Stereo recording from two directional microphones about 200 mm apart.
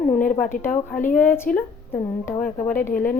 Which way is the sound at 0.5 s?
40° left (ahead or behind).